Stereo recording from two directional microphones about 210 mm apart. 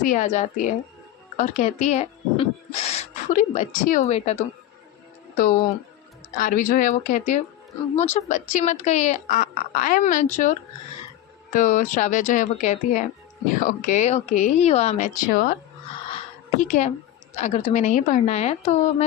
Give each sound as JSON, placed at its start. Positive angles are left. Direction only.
{"t": 0.0, "sound": "speech", "side_deg": 35}
{"t": 5.4, "sound": "speech", "side_deg": 40}
{"t": 11.5, "sound": "speech", "side_deg": 35}
{"t": 16.6, "sound": "speech", "side_deg": 35}